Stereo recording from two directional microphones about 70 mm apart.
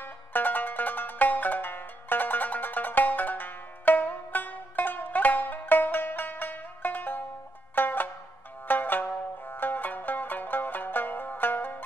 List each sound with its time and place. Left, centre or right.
0.0 s music: left
8.6 s zither: left